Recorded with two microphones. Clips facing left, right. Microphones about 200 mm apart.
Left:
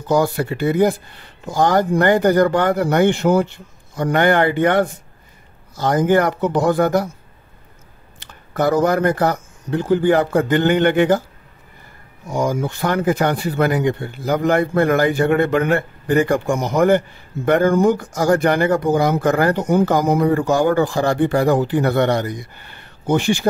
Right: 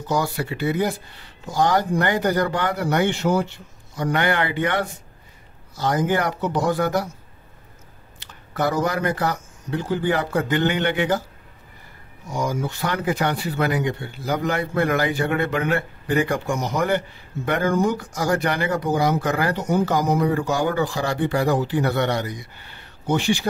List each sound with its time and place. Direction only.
0.1 s speech: 50° left (ahead or behind)
8.2 s speech: 50° left (ahead or behind)
12.3 s speech: 55° left (ahead or behind)